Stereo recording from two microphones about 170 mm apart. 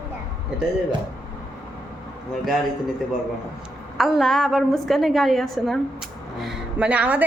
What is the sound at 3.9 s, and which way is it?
A woman's voice, centre (ahead or behind).